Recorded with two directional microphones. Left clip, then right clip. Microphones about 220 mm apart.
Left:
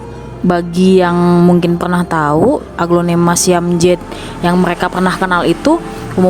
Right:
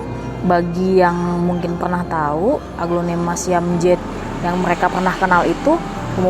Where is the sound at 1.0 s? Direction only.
40° left (ahead or behind).